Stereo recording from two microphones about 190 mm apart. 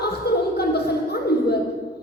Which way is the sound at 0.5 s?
55° left (ahead or behind).